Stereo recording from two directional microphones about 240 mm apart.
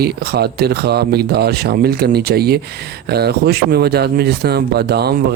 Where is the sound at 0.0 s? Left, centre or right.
Right.